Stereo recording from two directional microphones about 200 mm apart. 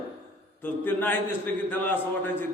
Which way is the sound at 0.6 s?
10° left (ahead or behind).